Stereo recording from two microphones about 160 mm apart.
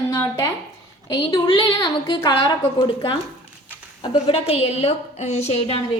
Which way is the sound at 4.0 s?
35° left (ahead or behind).